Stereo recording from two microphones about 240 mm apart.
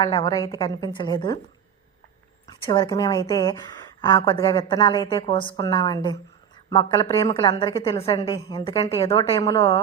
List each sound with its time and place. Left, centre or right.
0.0 s a woman's voice: centre
2.5 s a woman's voice: centre